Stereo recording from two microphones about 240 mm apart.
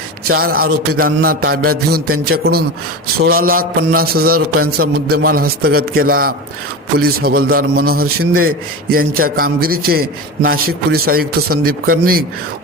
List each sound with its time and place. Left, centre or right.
0.3 s a man's voice: right